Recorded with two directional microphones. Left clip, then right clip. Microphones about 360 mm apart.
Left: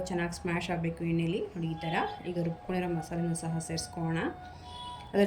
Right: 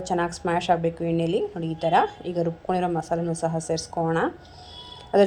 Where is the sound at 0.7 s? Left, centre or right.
Right.